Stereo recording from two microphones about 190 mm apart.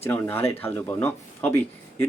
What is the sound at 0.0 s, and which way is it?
Speech, 10° left (ahead or behind).